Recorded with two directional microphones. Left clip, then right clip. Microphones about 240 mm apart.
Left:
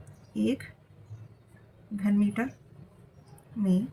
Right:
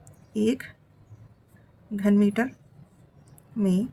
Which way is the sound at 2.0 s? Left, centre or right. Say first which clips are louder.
Right 6 dB; right.